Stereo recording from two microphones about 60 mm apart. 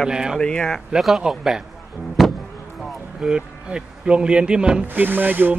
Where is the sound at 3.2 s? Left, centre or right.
Centre.